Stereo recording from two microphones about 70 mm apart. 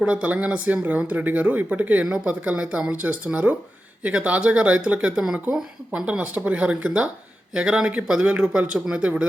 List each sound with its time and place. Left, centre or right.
0.0 s speech: centre